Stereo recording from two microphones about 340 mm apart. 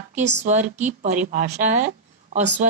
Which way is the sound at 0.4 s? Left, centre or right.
Right.